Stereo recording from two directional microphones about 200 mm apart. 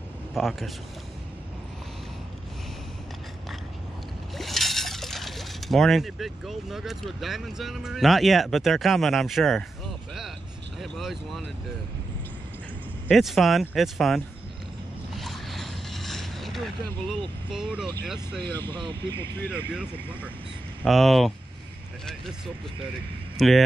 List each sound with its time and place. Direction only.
0.3 s speech: centre (ahead or behind)
4.4 s speech: centre (ahead or behind)
10.8 s speech: centre (ahead or behind)
13.1 s speech: centre (ahead or behind)
15.1 s mechanisms: centre (ahead or behind)
18.0 s speech: 5° right (ahead or behind)
18.4 s speech: 10° left (ahead or behind)
18.7 s speech: 25° right (ahead or behind)
19.7 s speech: 5° right (ahead or behind)
23.3 s speech: centre (ahead or behind)